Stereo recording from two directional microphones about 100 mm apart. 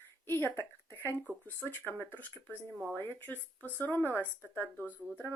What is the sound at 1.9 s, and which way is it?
Speech, 20° left (ahead or behind).